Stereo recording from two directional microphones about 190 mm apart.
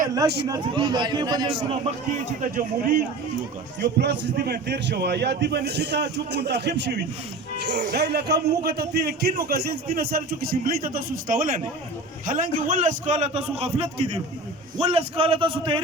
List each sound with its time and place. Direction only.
0.4 s a man's voice: 20° right (ahead or behind)
2.4 s a man's voice: 45° right (ahead or behind)
3.8 s a man's voice: 60° right (ahead or behind); by 15.8 s 25° right (ahead or behind)